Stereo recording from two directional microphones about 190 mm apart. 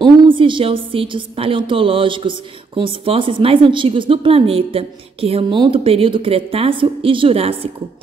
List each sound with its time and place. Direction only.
0.0 s a woman's voice: 25° right (ahead or behind)